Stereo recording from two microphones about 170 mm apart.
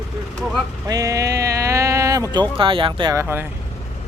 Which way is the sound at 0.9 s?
20° right (ahead or behind).